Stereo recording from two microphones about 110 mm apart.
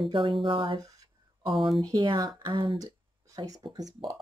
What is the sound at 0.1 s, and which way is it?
Speech, 50° right (ahead or behind).